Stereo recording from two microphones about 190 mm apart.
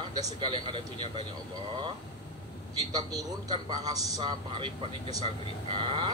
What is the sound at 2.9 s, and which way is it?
A man's voice, 20° right (ahead or behind).